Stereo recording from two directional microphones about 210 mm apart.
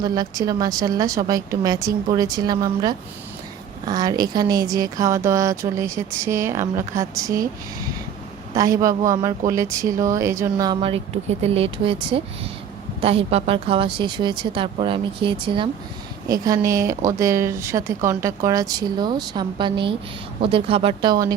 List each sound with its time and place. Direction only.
0.0 s speech: 20° right (ahead or behind)
8.5 s speech: 15° right (ahead or behind)